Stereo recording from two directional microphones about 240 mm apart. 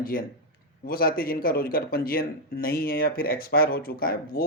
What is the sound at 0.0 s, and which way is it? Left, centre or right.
A man's voice, left.